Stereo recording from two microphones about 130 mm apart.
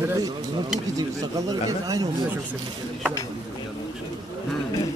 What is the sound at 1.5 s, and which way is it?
Speech, 30° right (ahead or behind).